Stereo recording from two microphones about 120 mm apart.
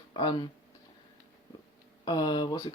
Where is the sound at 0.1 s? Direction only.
35° left (ahead or behind).